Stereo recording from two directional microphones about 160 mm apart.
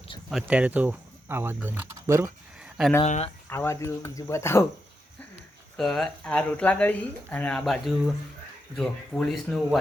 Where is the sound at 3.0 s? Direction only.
40° left (ahead or behind).